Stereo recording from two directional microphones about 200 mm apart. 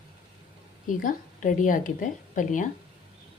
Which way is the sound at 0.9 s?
40° left (ahead or behind).